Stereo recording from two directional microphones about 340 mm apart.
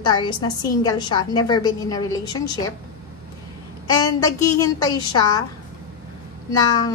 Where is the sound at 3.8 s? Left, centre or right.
Centre.